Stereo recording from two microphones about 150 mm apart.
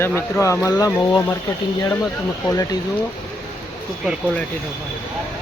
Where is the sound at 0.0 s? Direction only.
15° left (ahead or behind).